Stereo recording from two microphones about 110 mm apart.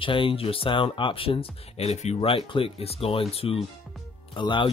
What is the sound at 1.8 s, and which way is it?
Speech, 85° left.